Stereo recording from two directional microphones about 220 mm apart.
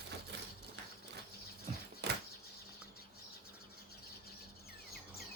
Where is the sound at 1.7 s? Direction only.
30° right (ahead or behind).